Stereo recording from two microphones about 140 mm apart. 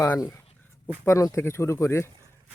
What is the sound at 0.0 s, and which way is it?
Speech, 25° left (ahead or behind).